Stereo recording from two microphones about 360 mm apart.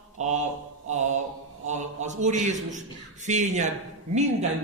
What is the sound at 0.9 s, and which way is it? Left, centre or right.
A man's voice, centre.